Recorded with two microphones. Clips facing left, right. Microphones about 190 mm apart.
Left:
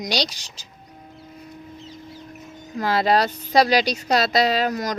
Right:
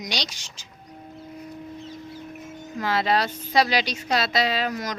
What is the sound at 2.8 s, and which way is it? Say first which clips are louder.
A woman's voice: left 4 dB; 40° left (ahead or behind).